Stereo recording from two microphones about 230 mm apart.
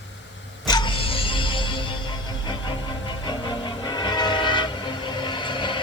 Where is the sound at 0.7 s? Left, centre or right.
Left.